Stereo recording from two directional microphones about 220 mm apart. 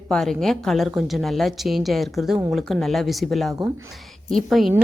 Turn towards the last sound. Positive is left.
turn(degrees=0)  # may be behind; listen again after turning